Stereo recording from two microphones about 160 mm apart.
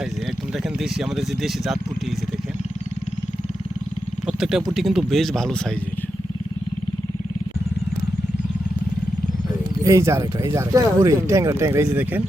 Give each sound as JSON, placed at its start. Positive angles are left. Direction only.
{"t": 0.5, "sound": "speech", "side_deg": 0}
{"t": 4.3, "sound": "speech", "side_deg": -5}
{"t": 9.8, "sound": "speech", "side_deg": -20}